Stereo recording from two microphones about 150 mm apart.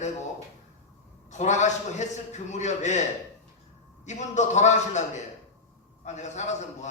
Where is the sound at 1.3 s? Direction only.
50° left (ahead or behind).